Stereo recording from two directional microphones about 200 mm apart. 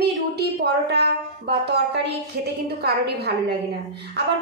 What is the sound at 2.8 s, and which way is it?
Speech, 55° right (ahead or behind).